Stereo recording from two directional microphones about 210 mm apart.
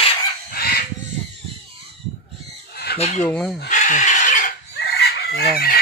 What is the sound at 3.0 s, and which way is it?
Chicken, 30° left (ahead or behind).